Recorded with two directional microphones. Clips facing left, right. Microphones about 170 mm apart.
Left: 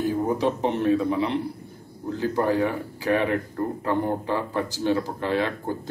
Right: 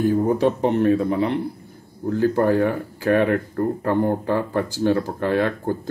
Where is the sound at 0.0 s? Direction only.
50° right (ahead or behind).